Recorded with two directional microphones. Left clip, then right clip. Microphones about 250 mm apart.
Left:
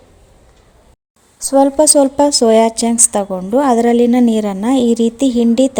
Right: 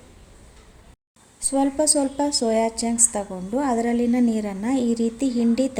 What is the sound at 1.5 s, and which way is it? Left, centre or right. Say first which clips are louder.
A woman's voice: left 11 dB; left.